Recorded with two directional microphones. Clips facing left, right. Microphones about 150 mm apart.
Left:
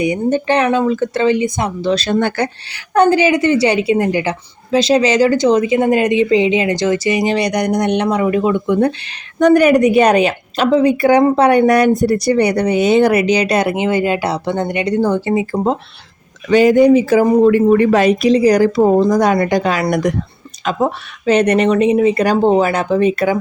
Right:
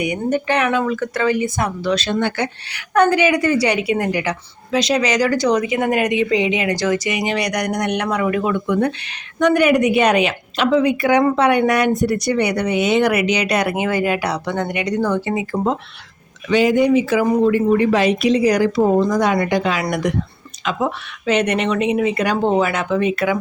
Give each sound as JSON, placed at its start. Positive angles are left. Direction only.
{"t": 0.0, "sound": "a woman's voice", "side_deg": 25}
{"t": 2.0, "sound": "speech", "side_deg": 45}
{"t": 2.7, "sound": "a woman's voice", "side_deg": 30}
{"t": 9.4, "sound": "a woman's voice", "side_deg": 40}
{"t": 16.5, "sound": "a woman's voice", "side_deg": 45}
{"t": 17.4, "sound": "a woman's voice", "side_deg": 55}